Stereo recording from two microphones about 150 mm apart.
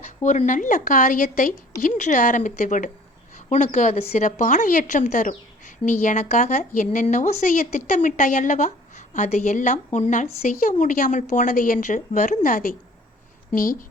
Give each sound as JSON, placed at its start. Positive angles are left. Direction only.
{"t": 0.2, "sound": "a woman's voice", "side_deg": 55}